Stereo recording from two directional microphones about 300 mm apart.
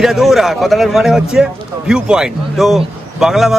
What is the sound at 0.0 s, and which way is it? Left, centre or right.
Speech, centre.